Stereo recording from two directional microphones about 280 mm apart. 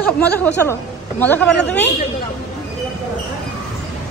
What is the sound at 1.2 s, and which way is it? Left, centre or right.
Speech, centre.